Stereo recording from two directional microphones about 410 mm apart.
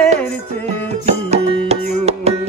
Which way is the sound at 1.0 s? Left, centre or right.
Centre.